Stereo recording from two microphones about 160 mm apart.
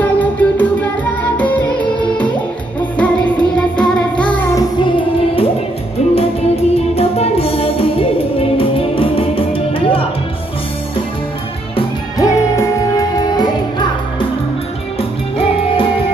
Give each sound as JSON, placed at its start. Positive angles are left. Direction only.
{"t": 0.0, "sound": "music", "side_deg": 10}
{"t": 4.6, "sound": "music", "side_deg": 30}
{"t": 12.2, "sound": "music", "side_deg": 20}
{"t": 15.0, "sound": "music", "side_deg": 35}